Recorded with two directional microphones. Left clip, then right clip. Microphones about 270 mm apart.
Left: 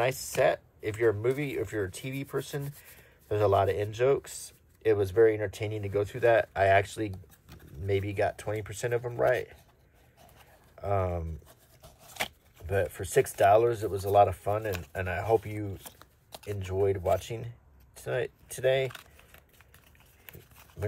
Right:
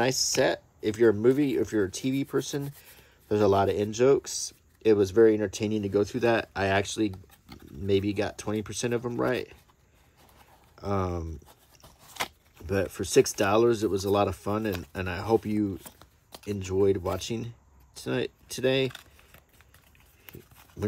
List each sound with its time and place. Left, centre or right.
0.0 s speech: centre
10.8 s speech: centre
12.6 s speech: centre
15.8 s a sound: centre
16.4 s speech: centre